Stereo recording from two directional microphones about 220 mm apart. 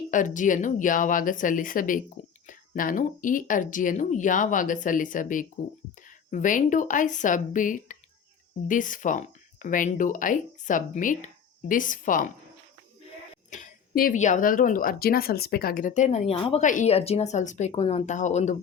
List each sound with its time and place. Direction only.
0.1 s speech: 35° left (ahead or behind)
2.2 s a sound: 35° left (ahead or behind)
2.5 s speech: 40° left (ahead or behind)
13.3 s speech: 35° left (ahead or behind)